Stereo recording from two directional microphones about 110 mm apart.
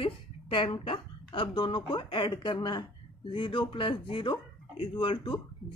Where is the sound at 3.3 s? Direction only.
50° left (ahead or behind).